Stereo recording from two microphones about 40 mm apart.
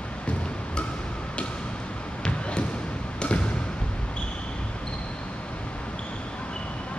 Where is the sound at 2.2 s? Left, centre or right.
Left.